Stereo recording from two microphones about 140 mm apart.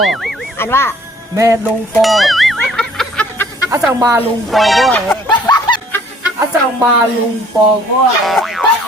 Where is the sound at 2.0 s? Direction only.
Centre (ahead or behind).